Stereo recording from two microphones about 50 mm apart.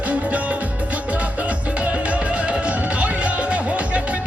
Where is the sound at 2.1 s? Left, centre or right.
Right.